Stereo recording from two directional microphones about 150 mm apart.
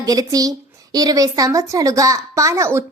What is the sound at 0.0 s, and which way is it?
Speech, 25° right (ahead or behind).